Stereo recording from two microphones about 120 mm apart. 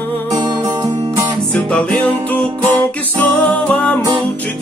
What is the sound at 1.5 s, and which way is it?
Music, 15° left (ahead or behind).